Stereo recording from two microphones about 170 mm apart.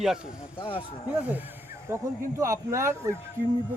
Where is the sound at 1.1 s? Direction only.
10° right (ahead or behind).